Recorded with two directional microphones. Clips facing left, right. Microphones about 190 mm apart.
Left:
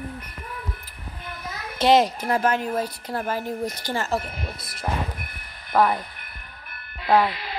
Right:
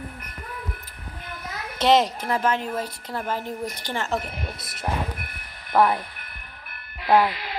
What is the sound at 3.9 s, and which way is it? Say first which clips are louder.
Speech: left 2 dB; 10° left (ahead or behind).